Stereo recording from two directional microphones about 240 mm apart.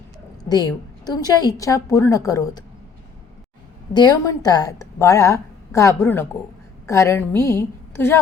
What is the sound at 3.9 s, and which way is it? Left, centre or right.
A woman's voice, centre.